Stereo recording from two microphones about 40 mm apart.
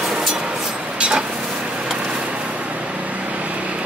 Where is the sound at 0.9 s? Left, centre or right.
Right.